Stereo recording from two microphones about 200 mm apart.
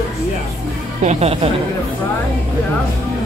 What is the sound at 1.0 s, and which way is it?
Speech, 30° right (ahead or behind).